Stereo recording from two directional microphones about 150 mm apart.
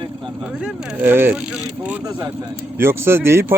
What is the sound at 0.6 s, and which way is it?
Speech, 15° right (ahead or behind).